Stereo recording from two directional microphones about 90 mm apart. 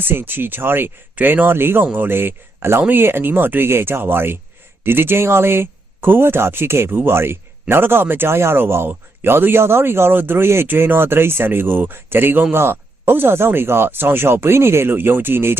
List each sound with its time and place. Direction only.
0.0 s speech: 25° right (ahead or behind)